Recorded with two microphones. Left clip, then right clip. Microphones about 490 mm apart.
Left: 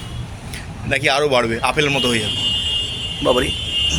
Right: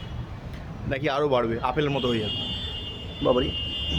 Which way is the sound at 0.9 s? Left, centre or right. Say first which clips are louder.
Left 8 dB; right.